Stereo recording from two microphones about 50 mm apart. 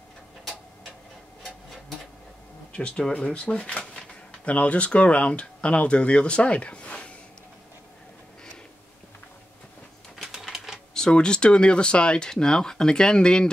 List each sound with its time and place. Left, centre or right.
2.7 s speech: centre
10.3 s typewriter: centre
10.9 s speech: centre